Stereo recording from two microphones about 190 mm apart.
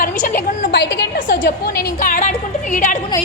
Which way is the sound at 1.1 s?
50° left (ahead or behind).